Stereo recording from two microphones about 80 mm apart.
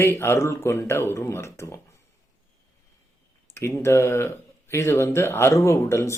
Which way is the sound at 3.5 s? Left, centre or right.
Left.